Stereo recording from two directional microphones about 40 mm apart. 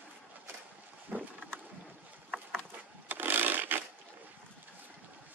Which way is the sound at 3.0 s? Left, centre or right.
Right.